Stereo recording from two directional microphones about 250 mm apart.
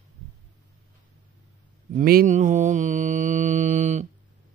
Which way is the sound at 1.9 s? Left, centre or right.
Right.